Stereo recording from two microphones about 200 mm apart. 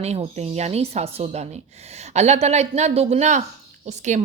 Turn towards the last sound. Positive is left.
turn(degrees=-35)  # may be behind; listen again after turning